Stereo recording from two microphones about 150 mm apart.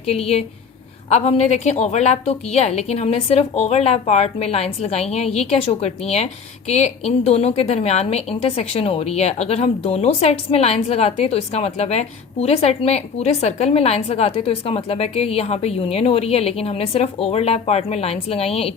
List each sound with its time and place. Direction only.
0.0 s a woman's voice: 45° left (ahead or behind)